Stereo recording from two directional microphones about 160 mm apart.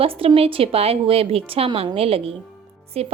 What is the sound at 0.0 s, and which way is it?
A woman's voice, 35° right (ahead or behind).